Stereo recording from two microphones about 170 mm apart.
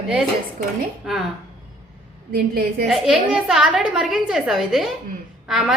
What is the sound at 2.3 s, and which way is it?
Speech, 65° right (ahead or behind).